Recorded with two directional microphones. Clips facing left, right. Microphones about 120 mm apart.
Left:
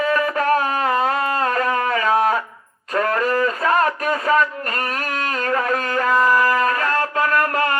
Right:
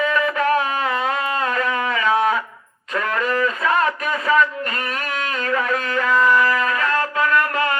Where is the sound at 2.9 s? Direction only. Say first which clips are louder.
Left 3 dB; 40° left (ahead or behind).